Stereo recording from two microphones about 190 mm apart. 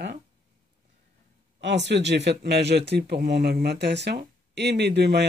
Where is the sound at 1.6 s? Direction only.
65° right (ahead or behind).